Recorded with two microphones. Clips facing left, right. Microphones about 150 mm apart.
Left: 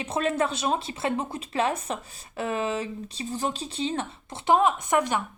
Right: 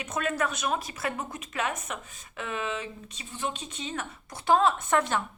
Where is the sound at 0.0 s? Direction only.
30° left (ahead or behind).